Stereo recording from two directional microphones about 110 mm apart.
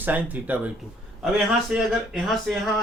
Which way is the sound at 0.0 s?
15° right (ahead or behind).